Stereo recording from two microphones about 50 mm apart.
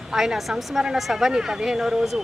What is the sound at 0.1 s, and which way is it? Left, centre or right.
Speech, centre.